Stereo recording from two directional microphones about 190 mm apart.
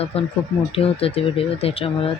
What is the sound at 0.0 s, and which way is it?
Speech, 30° left (ahead or behind).